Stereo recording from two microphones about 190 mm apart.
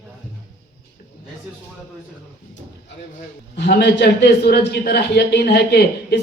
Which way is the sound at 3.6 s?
60° left (ahead or behind).